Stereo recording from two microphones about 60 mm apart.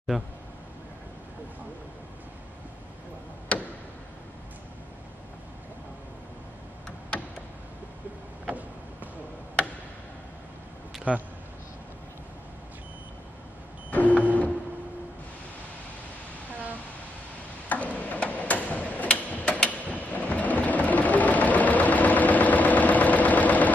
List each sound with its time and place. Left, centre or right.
3.5 s tick-tock: centre
8.5 s vehicle: right
11.1 s speech: right
13.8 s a sound: left
17.6 s tick-tock: left